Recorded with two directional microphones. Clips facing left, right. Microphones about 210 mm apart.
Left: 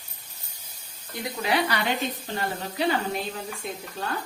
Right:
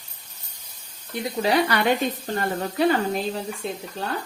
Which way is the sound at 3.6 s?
30° right (ahead or behind).